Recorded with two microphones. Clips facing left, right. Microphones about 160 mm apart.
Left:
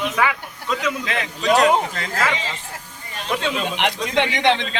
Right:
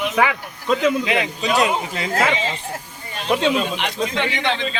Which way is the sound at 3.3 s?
15° right (ahead or behind).